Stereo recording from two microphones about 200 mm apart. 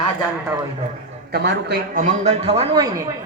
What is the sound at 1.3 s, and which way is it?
Speech, 55° right (ahead or behind).